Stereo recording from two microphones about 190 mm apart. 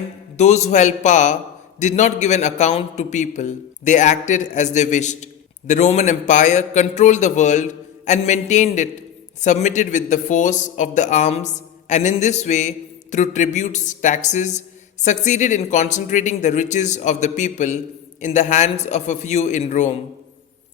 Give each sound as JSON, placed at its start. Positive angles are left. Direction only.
{"t": 0.3, "sound": "a man's voice", "side_deg": 35}